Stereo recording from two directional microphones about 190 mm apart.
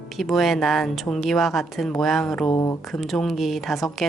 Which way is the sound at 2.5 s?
20° left (ahead or behind).